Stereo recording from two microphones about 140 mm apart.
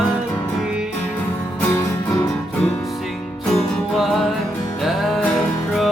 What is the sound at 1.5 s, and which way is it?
Music, 20° left (ahead or behind).